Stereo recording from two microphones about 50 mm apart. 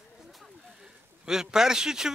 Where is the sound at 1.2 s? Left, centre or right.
Centre.